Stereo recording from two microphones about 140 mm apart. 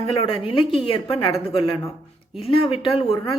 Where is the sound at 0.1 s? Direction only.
40° left (ahead or behind).